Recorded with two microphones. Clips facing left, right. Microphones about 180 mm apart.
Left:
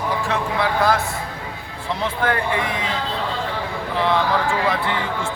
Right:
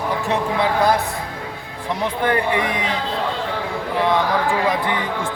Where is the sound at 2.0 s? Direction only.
15° right (ahead or behind).